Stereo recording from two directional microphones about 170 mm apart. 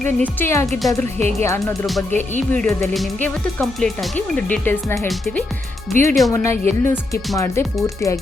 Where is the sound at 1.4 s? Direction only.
15° left (ahead or behind).